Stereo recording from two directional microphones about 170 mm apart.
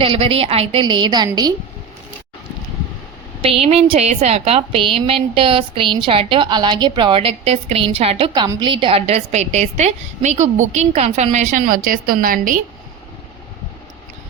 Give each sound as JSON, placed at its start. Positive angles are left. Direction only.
{"t": 0.0, "sound": "a woman's voice", "side_deg": -30}
{"t": 3.4, "sound": "a woman's voice", "side_deg": -35}